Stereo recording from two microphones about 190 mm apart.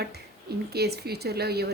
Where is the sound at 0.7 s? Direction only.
55° right (ahead or behind).